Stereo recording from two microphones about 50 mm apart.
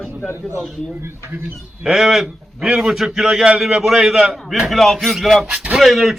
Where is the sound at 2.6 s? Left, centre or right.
Right.